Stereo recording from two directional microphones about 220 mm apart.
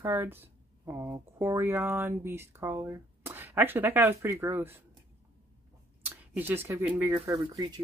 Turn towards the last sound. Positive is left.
turn(degrees=-20)  # may be behind; listen again after turning